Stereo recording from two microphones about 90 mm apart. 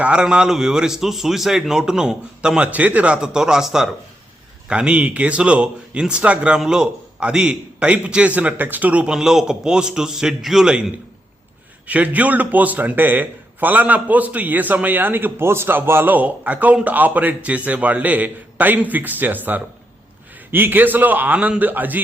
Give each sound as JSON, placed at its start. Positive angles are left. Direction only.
{"t": 0.0, "sound": "a man's voice", "side_deg": -10}